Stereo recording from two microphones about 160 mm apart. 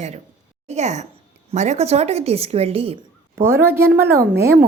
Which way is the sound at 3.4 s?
15° right (ahead or behind).